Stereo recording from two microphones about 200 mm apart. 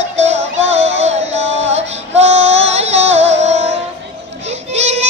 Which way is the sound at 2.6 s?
35° right (ahead or behind).